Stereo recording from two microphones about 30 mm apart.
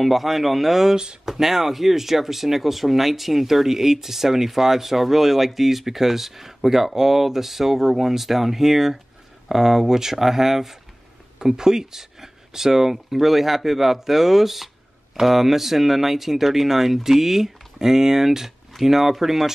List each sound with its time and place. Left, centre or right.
0.0 s speech: centre
11.3 s speech: right